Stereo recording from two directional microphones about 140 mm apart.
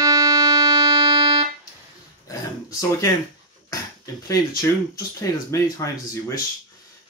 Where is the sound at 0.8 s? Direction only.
40° right (ahead or behind).